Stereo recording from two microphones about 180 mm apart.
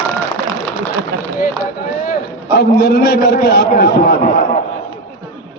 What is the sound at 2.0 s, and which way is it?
A man's voice, 55° left (ahead or behind).